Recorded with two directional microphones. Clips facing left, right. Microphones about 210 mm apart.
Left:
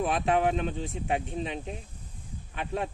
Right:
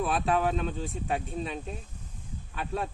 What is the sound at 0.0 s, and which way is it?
Speech, 20° left (ahead or behind).